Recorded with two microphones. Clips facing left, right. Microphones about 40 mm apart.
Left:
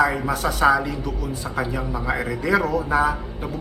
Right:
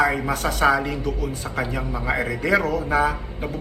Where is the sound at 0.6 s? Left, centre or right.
Centre.